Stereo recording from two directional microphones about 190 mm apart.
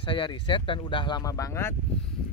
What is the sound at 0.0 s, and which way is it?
Speech, 25° left (ahead or behind).